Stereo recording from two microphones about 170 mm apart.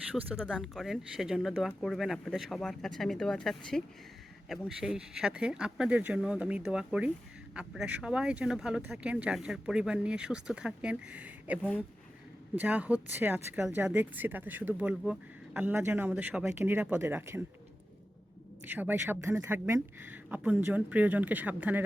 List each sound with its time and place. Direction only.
0.1 s speech: 10° right (ahead or behind)
18.6 s speech: 10° right (ahead or behind)